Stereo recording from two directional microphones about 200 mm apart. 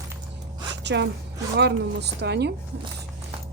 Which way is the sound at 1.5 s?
60° right (ahead or behind).